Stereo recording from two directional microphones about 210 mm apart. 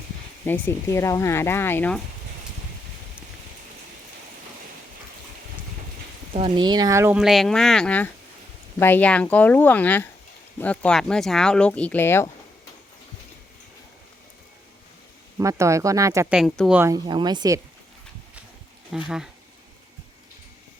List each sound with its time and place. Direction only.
0.4 s speech: 10° left (ahead or behind)
6.3 s speech: 20° right (ahead or behind)
7.2 s speech: centre (ahead or behind)
15.4 s speech: 15° right (ahead or behind)
18.9 s speech: 5° right (ahead or behind)